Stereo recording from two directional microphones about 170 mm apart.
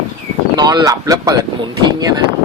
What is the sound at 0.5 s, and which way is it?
Speech, 20° right (ahead or behind).